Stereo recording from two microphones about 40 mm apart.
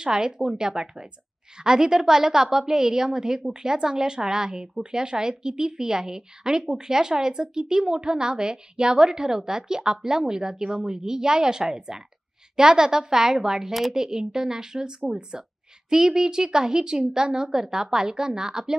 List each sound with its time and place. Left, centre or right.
0.0 s a woman's voice: centre